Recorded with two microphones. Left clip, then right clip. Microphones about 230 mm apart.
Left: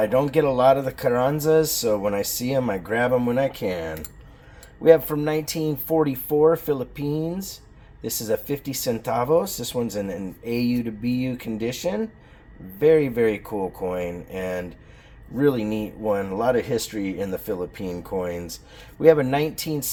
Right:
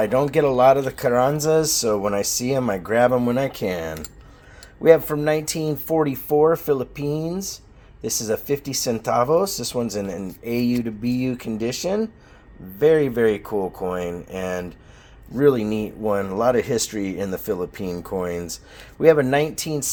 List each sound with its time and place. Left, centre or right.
0.0 s a man's voice: right